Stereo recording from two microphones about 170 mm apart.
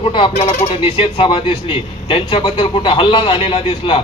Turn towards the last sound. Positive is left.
turn(degrees=30)  # may be behind; listen again after turning